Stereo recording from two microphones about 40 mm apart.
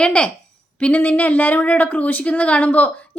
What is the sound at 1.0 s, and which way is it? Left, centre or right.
A woman's voice, left.